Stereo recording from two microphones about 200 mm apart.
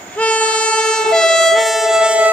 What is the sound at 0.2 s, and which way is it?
Vehicle, 5° left (ahead or behind).